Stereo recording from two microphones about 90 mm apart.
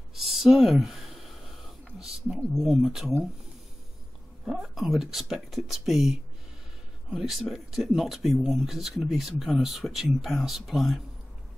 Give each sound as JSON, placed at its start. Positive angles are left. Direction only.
{"t": 0.1, "sound": "a sound", "side_deg": -5}
{"t": 2.3, "sound": "speech", "side_deg": 0}
{"t": 4.5, "sound": "speech", "side_deg": -5}